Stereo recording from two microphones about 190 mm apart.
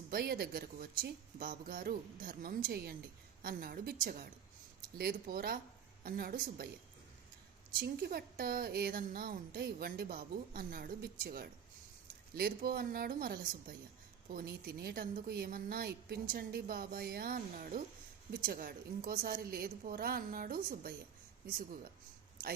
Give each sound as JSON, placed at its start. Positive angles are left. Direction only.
{"t": 0.1, "sound": "a woman's voice", "side_deg": -55}
{"t": 7.8, "sound": "a woman's voice", "side_deg": -55}